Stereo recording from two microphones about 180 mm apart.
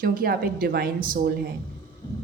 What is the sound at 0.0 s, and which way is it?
A woman's voice, 55° right (ahead or behind).